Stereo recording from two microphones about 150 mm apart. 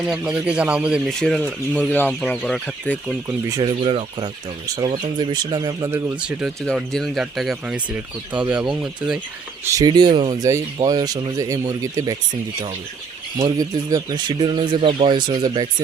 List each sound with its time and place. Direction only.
0.1 s speech: 5° right (ahead or behind)
1.2 s speech: 5° left (ahead or behind)
2.4 s speech: centre (ahead or behind)
3.6 s speech: 30° right (ahead or behind)
5.9 s speech: 10° right (ahead or behind)
9.6 s speech: 25° right (ahead or behind)
13.6 s speech: 25° right (ahead or behind)